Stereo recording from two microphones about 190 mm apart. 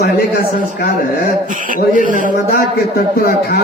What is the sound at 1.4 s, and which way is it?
Speech, 45° right (ahead or behind).